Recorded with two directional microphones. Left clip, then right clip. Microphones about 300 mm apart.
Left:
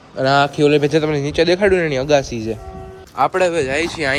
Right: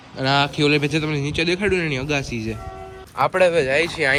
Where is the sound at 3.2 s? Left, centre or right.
Centre.